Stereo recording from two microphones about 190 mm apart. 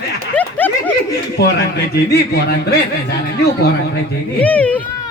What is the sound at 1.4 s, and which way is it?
Speech, 55° left (ahead or behind).